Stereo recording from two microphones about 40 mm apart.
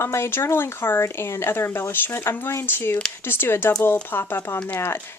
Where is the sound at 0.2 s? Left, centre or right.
Left.